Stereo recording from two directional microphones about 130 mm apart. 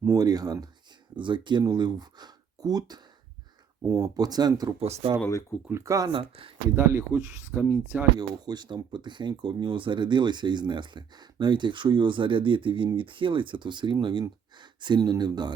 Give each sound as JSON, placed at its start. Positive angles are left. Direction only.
{"t": 0.0, "sound": "speech", "side_deg": -25}
{"t": 4.8, "sound": "speech", "side_deg": -45}
{"t": 5.6, "sound": "speech", "side_deg": -20}
{"t": 6.1, "sound": "speech", "side_deg": -40}
{"t": 6.7, "sound": "speech", "side_deg": -15}
{"t": 8.4, "sound": "speech", "side_deg": -35}